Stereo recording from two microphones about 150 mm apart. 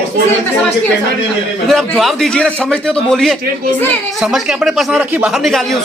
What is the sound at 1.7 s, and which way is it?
A man's voice, centre (ahead or behind).